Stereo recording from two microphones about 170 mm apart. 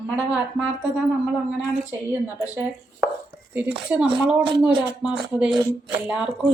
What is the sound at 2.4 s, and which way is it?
A woman's voice, 15° right (ahead or behind).